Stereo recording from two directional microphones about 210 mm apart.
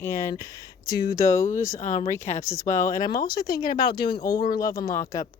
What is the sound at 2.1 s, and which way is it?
Speech, 10° left (ahead or behind).